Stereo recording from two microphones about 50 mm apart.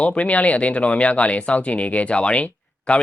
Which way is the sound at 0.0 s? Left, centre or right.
Left.